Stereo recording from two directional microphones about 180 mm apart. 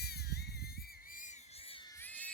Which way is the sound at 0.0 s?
60° left (ahead or behind).